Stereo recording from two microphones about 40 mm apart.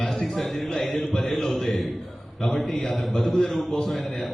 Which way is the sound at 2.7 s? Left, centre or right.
Left.